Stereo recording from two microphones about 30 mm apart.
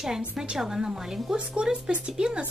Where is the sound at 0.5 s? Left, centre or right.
Centre; by 2.4 s right.